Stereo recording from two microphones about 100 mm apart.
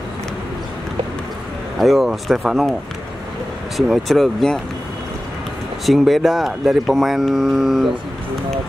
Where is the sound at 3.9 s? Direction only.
Centre (ahead or behind).